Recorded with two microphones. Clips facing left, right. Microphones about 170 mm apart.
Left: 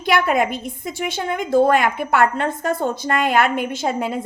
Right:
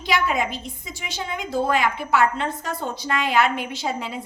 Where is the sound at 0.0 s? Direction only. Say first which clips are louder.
Left 5 dB; 55° left (ahead or behind).